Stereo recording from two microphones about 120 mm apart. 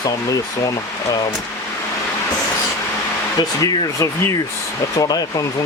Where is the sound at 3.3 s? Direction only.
30° left (ahead or behind).